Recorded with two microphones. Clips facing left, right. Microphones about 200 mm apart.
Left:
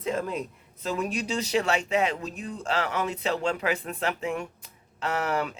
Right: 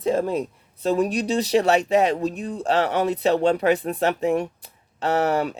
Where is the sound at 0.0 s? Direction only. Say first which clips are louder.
Right 7 dB; 35° right (ahead or behind).